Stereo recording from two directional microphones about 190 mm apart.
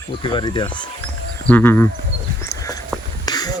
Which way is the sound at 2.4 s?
15° left (ahead or behind).